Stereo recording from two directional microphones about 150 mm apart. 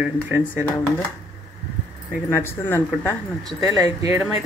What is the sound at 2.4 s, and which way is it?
Speech, 10° left (ahead or behind).